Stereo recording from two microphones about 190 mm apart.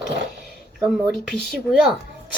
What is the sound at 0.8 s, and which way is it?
Speech, centre (ahead or behind).